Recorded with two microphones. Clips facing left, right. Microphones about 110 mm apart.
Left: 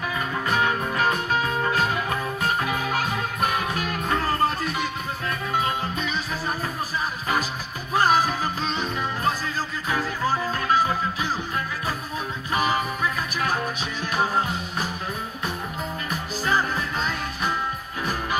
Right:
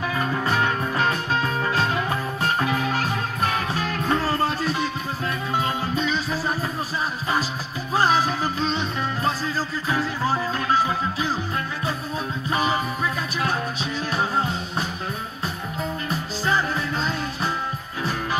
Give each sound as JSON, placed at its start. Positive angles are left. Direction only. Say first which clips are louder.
{"t": 4.1, "sound": "music", "louder": "even", "side_deg": -30}
{"t": 7.9, "sound": "music", "louder": "even", "side_deg": -30}
{"t": 12.4, "sound": "music", "louder": "even", "side_deg": -30}